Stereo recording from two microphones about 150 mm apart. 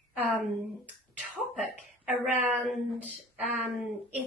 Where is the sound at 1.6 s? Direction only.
10° right (ahead or behind).